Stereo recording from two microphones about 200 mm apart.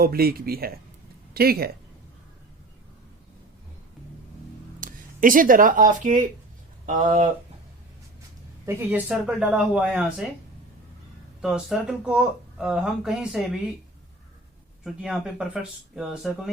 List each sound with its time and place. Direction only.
0.0 s speech: 50° right (ahead or behind)
4.8 s speech: 40° right (ahead or behind)
8.6 s speech: 15° right (ahead or behind)
11.4 s speech: 5° right (ahead or behind)
14.8 s speech: 5° right (ahead or behind)